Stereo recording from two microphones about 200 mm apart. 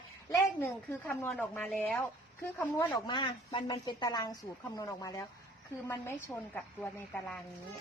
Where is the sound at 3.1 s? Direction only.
25° left (ahead or behind).